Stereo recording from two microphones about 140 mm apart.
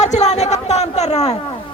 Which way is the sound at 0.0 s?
55° left (ahead or behind).